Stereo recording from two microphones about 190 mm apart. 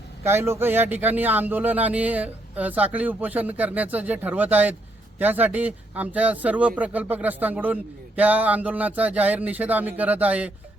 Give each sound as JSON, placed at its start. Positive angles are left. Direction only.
{"t": 0.3, "sound": "a man's voice", "side_deg": -15}